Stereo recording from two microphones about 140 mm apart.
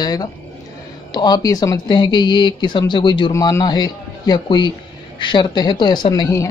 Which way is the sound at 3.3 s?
25° left (ahead or behind).